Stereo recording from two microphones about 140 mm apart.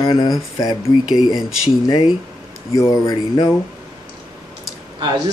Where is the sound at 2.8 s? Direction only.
25° left (ahead or behind).